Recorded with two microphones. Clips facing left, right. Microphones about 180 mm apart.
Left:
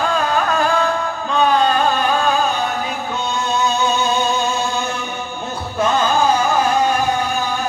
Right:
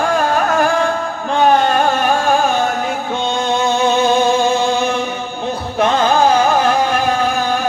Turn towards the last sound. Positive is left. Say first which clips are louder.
# right 2 dB
turn(degrees=-90)